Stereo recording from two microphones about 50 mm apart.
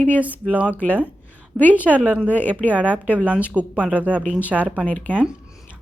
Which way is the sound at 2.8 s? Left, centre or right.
Right.